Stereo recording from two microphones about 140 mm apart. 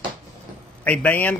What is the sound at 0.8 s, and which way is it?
Speech, 10° left (ahead or behind).